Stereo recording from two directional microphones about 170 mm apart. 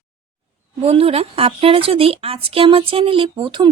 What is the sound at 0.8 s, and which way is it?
Speech, 35° right (ahead or behind).